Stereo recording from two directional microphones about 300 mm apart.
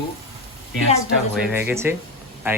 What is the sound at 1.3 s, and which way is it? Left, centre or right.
Speech, centre.